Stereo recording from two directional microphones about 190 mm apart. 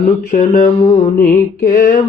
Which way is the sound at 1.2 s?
45° left (ahead or behind).